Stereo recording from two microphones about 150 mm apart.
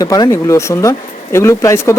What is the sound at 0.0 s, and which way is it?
Speech, 25° left (ahead or behind).